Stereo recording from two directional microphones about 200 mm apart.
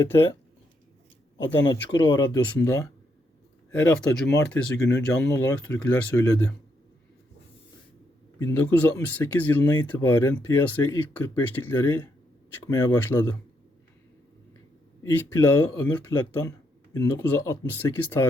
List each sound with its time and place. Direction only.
1.6 s speech: 20° left (ahead or behind)
8.4 s speech: 10° left (ahead or behind)
15.1 s speech: 10° left (ahead or behind)